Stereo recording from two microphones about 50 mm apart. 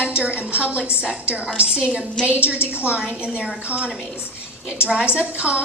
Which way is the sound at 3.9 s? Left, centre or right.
Centre.